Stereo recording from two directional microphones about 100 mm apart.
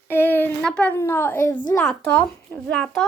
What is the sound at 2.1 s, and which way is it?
Speech, 10° left (ahead or behind).